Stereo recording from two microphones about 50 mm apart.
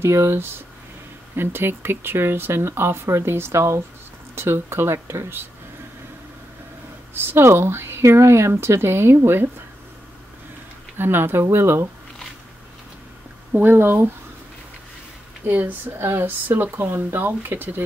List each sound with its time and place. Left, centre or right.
0.0 s speech: right
4.4 s speech: right
7.2 s speech: right
11.0 s speech: right
13.6 s speech: right
15.4 s speech: right